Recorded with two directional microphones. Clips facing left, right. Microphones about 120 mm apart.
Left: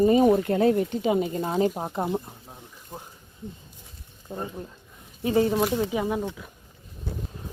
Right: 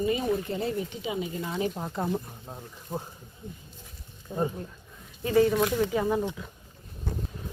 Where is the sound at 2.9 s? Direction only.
10° right (ahead or behind).